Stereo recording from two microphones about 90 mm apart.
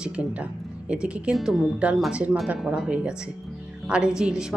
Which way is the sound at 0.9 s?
10° right (ahead or behind).